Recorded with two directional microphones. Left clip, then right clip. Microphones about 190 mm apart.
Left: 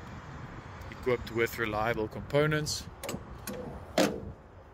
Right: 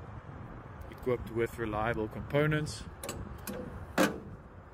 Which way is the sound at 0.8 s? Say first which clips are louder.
Left 3 dB; 5° right (ahead or behind).